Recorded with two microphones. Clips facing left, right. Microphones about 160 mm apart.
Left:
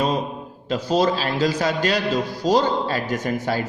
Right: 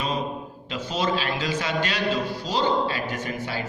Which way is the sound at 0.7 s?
40° left (ahead or behind).